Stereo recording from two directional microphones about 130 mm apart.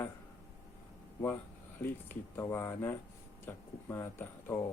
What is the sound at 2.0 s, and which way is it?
Speech, 20° left (ahead or behind).